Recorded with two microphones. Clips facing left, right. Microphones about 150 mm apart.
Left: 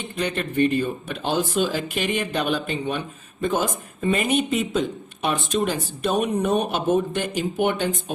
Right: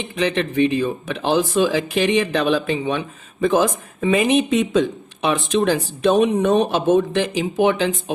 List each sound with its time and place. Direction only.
0.0 s speech: 90° right